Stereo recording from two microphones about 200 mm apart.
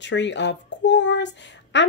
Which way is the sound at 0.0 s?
60° left (ahead or behind).